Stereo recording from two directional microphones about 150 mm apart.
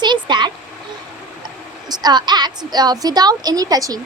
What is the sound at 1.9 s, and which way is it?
A woman's voice, 30° right (ahead or behind).